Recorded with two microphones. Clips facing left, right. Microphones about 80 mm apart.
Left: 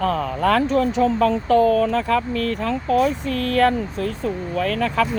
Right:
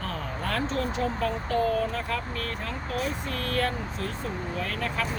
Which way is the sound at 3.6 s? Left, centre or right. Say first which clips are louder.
Left 12 dB; left.